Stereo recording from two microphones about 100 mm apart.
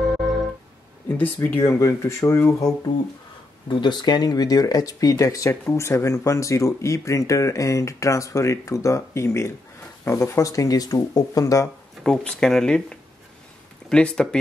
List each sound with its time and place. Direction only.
0.0 s music: centre (ahead or behind)
1.2 s speech: 20° left (ahead or behind)
1.6 s speech: 35° left (ahead or behind)
3.6 s speech: 50° left (ahead or behind); by 11.7 s 35° left (ahead or behind)
12.0 s speech: 5° left (ahead or behind)